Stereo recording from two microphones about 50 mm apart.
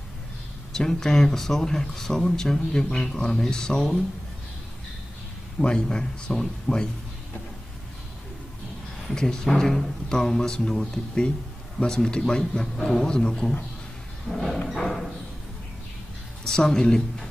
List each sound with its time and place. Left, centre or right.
0.7 s speech: centre
5.6 s speech: centre
9.0 s speech: centre
14.3 s a sound: centre
16.4 s speech: centre